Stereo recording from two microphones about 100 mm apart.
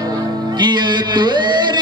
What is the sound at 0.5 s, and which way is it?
Music, 50° right (ahead or behind).